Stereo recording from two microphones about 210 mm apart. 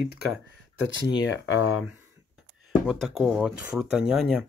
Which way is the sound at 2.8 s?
Centre (ahead or behind).